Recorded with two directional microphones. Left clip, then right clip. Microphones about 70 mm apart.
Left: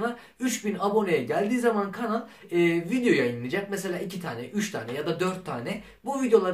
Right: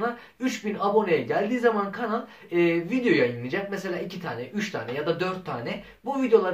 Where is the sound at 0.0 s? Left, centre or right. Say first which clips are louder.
Right 1 dB; left.